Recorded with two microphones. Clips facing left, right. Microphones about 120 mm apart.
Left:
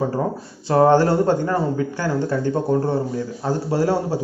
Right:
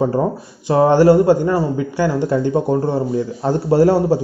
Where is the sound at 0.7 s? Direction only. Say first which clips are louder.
Right 3 dB; 15° right (ahead or behind).